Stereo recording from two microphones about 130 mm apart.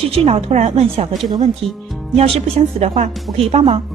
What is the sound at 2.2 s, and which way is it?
Speech, 50° right (ahead or behind).